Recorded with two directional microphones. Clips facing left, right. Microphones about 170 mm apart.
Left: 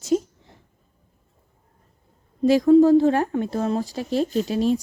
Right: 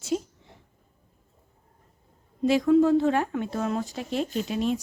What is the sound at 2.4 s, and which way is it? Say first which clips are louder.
Speech: left 5 dB; 35° left (ahead or behind).